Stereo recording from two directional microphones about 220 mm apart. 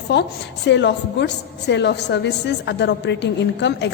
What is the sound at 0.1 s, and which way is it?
A woman's voice, 50° left (ahead or behind).